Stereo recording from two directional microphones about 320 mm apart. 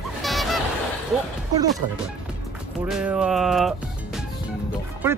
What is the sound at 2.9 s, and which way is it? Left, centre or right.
Speech, centre.